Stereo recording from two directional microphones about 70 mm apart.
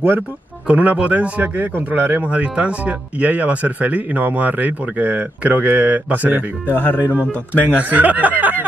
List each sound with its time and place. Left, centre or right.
0.7 s speech: centre
6.7 s speech: left
7.1 s speech: right